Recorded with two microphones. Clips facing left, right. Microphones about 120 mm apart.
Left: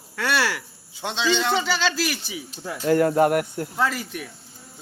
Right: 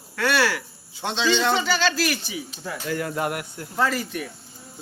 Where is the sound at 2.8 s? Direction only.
50° left (ahead or behind).